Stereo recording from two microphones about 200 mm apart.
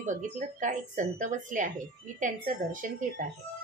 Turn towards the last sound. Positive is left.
turn(degrees=-40)  # may be behind; listen again after turning